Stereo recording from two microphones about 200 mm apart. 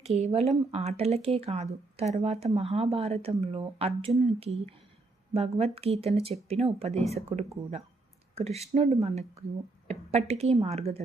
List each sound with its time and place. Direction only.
0.0 s speech: 30° right (ahead or behind)